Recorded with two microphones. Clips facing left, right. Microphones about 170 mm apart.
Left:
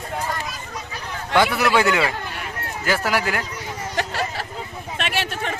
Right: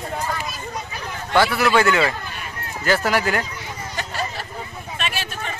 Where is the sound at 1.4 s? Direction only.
15° left (ahead or behind).